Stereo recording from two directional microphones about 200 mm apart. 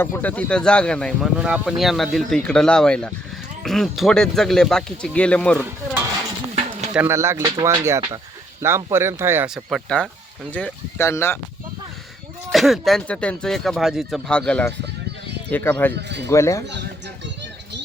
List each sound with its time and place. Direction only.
0.0 s speech: 10° left (ahead or behind)
6.9 s speech: 10° right (ahead or behind); by 11.3 s 10° left (ahead or behind)
12.5 s speech: centre (ahead or behind)
16.0 s speech: 60° right (ahead or behind)
16.3 s speech: 15° left (ahead or behind)